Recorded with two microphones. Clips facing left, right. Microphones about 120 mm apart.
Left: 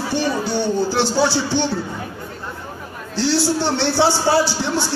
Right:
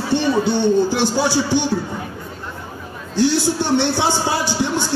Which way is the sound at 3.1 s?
15° right (ahead or behind).